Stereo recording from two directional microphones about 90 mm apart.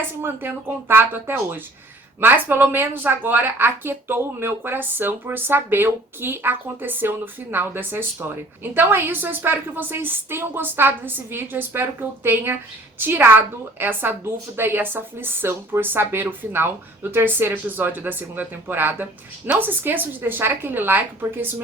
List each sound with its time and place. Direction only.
0.2 s a woman's voice: 25° right (ahead or behind)